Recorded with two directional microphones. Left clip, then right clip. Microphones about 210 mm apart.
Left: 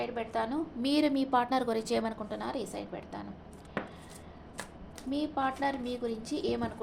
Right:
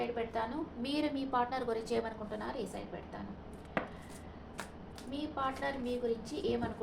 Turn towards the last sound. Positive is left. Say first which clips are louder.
# left 3 dB
turn(degrees=55)  # may be behind; listen again after turning